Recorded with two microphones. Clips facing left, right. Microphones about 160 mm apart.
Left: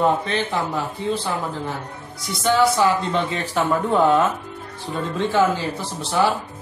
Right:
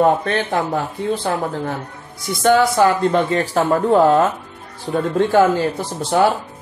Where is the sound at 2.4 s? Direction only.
55° right (ahead or behind).